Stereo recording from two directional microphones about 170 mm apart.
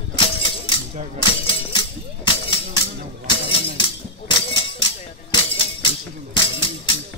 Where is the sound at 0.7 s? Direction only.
30° left (ahead or behind).